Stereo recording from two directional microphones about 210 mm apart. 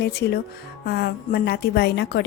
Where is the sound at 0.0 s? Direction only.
50° left (ahead or behind).